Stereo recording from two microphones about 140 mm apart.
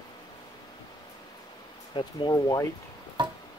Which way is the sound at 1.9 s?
30° left (ahead or behind).